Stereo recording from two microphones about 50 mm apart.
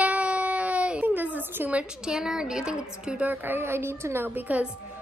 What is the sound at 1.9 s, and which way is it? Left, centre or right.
A woman's voice, centre.